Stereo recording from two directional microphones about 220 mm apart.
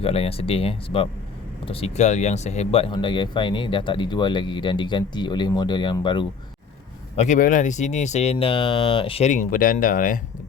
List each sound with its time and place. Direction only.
0.0 s speech: 25° left (ahead or behind)
7.2 s speech: 35° left (ahead or behind)